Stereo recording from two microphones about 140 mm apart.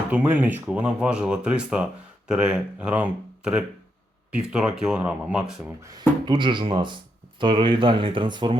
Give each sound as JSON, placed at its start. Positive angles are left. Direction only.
{"t": 0.1, "sound": "speech", "side_deg": -10}
{"t": 5.8, "sound": "speech", "side_deg": -30}